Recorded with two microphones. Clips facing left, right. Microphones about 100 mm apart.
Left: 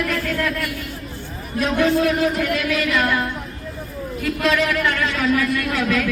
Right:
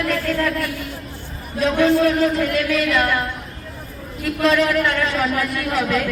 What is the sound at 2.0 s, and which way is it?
Speech, 35° right (ahead or behind).